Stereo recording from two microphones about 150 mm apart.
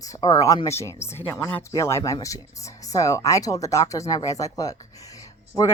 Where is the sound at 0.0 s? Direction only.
25° left (ahead or behind).